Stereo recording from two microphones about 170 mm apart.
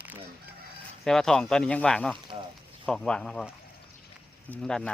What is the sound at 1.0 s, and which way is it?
Speech, 5° left (ahead or behind).